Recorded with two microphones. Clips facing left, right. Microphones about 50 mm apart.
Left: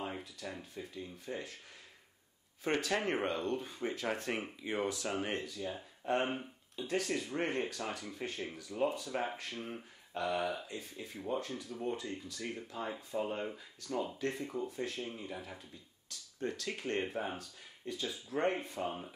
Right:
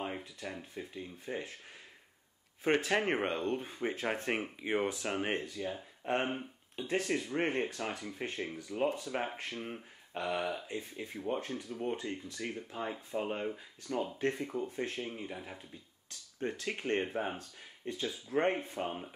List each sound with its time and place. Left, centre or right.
0.0 s a sound: right
0.5 s speech: right
2.6 s speech: right
6.2 s speech: centre
6.9 s speech: right
9.6 s speech: centre
10.7 s speech: right
16.3 s speech: right